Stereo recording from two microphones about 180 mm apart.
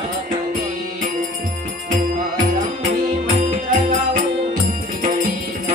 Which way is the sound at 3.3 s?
45° right (ahead or behind).